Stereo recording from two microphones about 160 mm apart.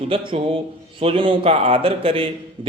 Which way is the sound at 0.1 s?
35° right (ahead or behind).